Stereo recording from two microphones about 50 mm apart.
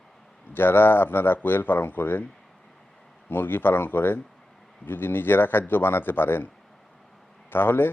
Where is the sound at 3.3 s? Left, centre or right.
Left.